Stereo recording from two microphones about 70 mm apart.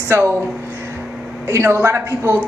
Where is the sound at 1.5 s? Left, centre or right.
Right.